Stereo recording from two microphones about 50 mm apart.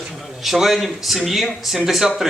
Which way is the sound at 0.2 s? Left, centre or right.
Centre.